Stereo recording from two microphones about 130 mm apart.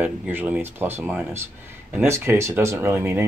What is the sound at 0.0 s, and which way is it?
Speech, 15° right (ahead or behind).